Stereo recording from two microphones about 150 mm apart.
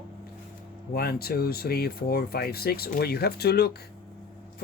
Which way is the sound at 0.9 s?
90° left.